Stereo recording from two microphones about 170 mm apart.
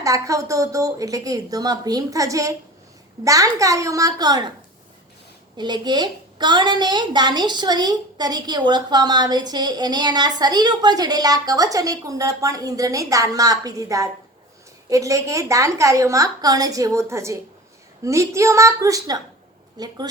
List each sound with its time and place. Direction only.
0.0 s a woman's voice: 20° right (ahead or behind)
5.5 s a woman's voice: 25° right (ahead or behind)